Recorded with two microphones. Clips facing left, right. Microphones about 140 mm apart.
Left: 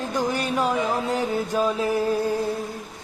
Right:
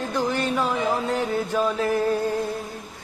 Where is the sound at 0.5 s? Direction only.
35° left (ahead or behind).